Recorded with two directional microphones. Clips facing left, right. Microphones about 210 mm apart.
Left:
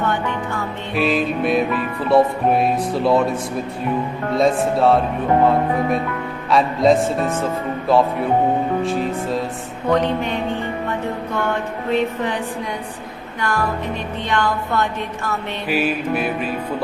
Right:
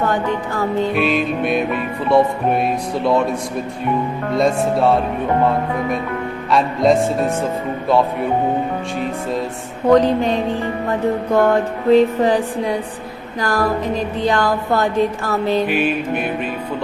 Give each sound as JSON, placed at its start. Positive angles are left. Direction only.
{"t": 0.0, "sound": "music", "side_deg": -35}
{"t": 0.9, "sound": "music", "side_deg": 0}
{"t": 4.4, "sound": "music", "side_deg": 0}
{"t": 6.5, "sound": "music", "side_deg": 0}
{"t": 9.9, "sound": "music", "side_deg": -35}
{"t": 15.6, "sound": "music", "side_deg": 5}